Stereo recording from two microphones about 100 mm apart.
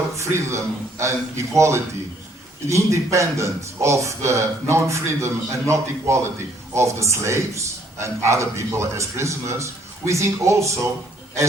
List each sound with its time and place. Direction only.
0.2 s speech: 30° right (ahead or behind)